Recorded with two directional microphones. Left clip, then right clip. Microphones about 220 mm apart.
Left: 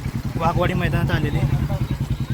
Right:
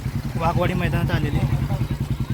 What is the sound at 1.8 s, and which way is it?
Vehicle, 45° right (ahead or behind).